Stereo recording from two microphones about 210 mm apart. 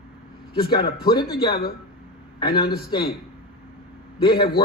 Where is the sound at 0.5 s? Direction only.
20° left (ahead or behind).